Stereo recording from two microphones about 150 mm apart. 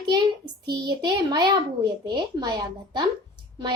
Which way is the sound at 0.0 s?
30° right (ahead or behind).